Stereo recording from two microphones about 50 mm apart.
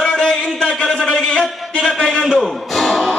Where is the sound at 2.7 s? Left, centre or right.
Centre.